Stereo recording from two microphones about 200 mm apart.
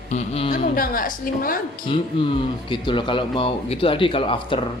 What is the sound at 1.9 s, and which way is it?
Speech, 25° left (ahead or behind).